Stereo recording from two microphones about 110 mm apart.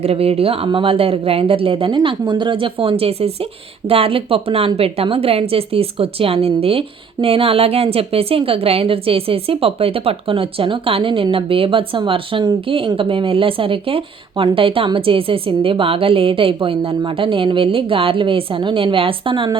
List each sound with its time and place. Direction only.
0.0 s a woman's voice: 65° right (ahead or behind)